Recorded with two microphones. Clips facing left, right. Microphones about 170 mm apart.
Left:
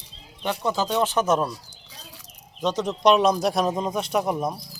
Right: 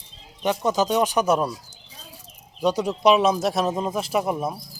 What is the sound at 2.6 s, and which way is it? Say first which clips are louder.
Speech: right 3 dB; 10° right (ahead or behind).